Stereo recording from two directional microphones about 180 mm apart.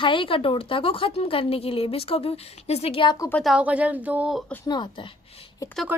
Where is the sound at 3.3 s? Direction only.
Centre (ahead or behind).